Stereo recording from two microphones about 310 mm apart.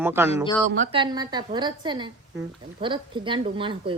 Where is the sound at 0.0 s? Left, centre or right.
Centre.